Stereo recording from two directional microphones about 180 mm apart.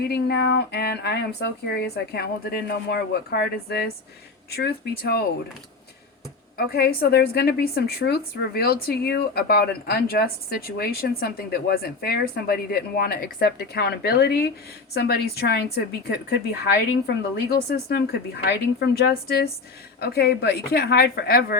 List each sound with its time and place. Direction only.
0.0 s a woman's voice: 60° left (ahead or behind)
6.6 s a woman's voice: 60° left (ahead or behind)